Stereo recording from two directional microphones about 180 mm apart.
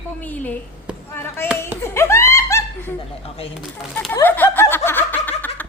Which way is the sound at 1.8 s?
15° left (ahead or behind).